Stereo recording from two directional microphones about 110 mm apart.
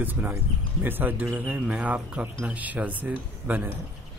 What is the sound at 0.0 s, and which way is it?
A man's voice, 15° right (ahead or behind).